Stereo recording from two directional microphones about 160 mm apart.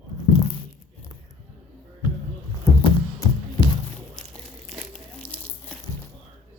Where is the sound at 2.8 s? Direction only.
30° left (ahead or behind).